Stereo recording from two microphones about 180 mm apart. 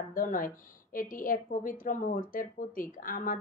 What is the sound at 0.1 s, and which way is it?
A woman's voice, 50° left (ahead or behind).